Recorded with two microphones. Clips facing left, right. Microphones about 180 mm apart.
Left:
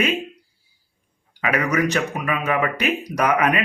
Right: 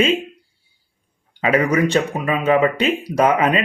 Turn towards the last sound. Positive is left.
turn(degrees=-25)  # may be behind; listen again after turning